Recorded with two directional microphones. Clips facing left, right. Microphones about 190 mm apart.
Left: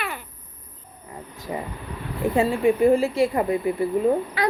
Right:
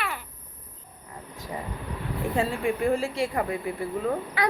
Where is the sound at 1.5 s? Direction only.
10° left (ahead or behind).